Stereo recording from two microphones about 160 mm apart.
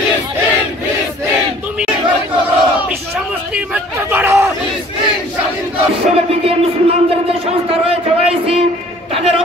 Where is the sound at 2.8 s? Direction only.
5° right (ahead or behind).